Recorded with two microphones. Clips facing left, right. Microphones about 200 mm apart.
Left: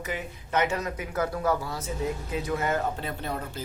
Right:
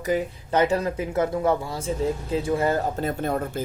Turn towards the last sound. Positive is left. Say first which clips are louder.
# right 8 dB
turn(degrees=-50)  # may be behind; listen again after turning